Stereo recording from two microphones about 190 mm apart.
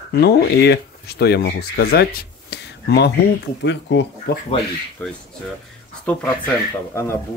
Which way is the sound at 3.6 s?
65° left (ahead or behind).